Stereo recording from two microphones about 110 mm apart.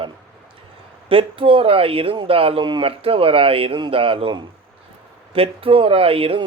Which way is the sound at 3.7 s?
50° right (ahead or behind).